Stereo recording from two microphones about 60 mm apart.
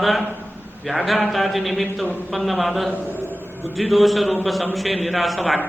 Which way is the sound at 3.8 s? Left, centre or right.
Centre.